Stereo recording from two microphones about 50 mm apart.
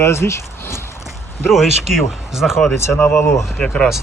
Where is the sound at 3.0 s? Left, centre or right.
Left.